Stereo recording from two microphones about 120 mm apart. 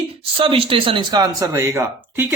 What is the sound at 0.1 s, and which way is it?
A man's voice, 50° right (ahead or behind).